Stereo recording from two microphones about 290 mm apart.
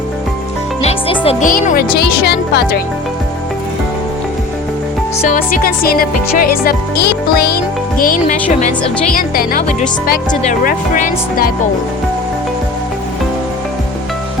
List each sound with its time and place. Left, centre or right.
0.8 s speech: centre
5.3 s music: left
9.1 s speech: left